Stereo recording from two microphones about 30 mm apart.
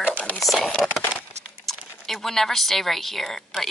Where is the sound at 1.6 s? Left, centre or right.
Centre.